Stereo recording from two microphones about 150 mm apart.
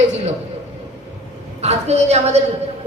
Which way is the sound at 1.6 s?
45° right (ahead or behind).